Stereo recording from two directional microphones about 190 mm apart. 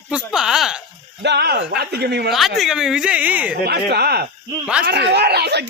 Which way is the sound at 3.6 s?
60° right (ahead or behind).